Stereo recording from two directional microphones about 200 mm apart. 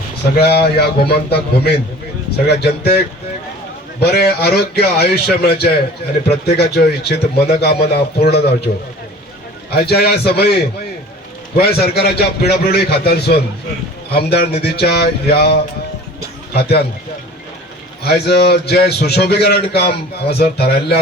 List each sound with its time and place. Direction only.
0.4 s speech: 50° left (ahead or behind)
4.0 s speech: 50° left (ahead or behind)
16.6 s speech: 55° left (ahead or behind)
18.0 s speech: 55° left (ahead or behind)